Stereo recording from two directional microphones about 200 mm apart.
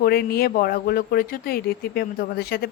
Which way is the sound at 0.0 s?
50° left (ahead or behind).